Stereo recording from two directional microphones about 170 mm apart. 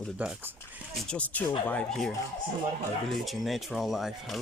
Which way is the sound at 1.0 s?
5° left (ahead or behind).